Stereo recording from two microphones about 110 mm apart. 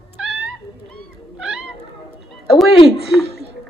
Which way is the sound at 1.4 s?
5° right (ahead or behind).